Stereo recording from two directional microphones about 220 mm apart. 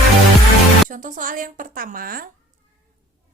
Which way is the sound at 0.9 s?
35° right (ahead or behind).